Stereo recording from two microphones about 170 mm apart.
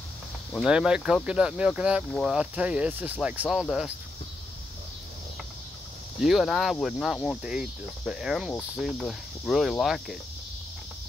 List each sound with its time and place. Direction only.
0.6 s speech: 5° right (ahead or behind)
6.2 s speech: centre (ahead or behind)